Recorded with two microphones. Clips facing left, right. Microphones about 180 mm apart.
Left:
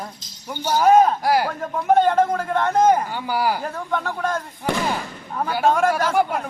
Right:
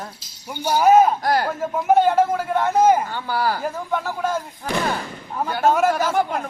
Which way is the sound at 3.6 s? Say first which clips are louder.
Right 1 dB; 5° right (ahead or behind).